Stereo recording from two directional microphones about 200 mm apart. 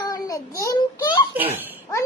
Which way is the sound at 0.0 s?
15° left (ahead or behind).